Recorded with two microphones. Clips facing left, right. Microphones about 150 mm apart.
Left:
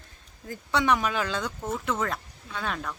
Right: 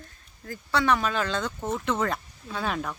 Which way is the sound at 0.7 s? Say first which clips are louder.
Even; 15° left (ahead or behind).